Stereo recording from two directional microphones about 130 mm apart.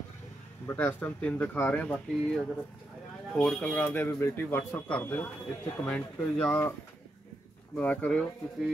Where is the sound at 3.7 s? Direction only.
15° left (ahead or behind).